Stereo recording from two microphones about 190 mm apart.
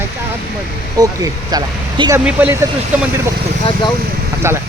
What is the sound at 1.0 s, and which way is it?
Speech, 20° right (ahead or behind).